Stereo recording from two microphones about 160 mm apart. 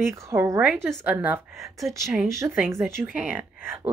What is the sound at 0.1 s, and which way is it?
Speech, 20° right (ahead or behind).